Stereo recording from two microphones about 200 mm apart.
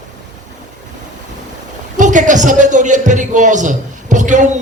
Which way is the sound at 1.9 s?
40° right (ahead or behind).